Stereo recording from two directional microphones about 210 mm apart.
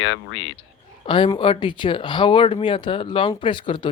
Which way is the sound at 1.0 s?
25° left (ahead or behind).